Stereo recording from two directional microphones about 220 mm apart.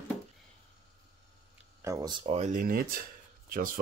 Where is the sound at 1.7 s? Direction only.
15° right (ahead or behind).